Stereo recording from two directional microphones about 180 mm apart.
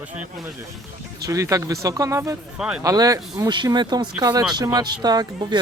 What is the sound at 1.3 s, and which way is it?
Speech, 20° right (ahead or behind).